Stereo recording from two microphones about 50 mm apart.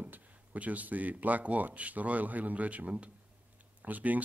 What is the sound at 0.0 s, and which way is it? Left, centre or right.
A man's voice, right.